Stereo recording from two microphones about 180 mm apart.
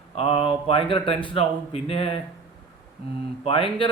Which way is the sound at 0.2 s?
30° left (ahead or behind).